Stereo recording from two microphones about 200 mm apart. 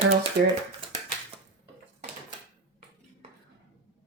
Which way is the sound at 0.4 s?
50° right (ahead or behind).